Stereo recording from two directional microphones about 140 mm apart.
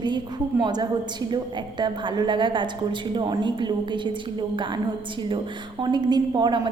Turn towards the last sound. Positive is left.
turn(degrees=-30)  # may be behind; listen again after turning